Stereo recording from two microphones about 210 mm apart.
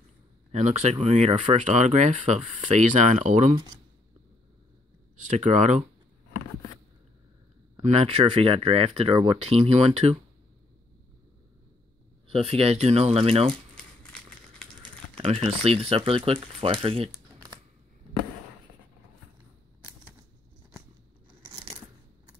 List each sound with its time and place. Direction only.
0.5 s speech: 35° right (ahead or behind)
5.2 s speech: 35° right (ahead or behind)
7.8 s speech: 30° right (ahead or behind)
12.3 s speech: 30° right (ahead or behind)
14.8 s speech: 25° right (ahead or behind)